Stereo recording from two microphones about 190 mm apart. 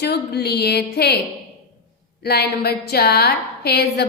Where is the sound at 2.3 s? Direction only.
55° left (ahead or behind).